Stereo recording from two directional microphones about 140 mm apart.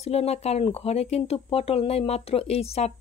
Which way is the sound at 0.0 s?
50° left (ahead or behind).